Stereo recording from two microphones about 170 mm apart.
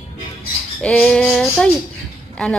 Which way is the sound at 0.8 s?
5° left (ahead or behind).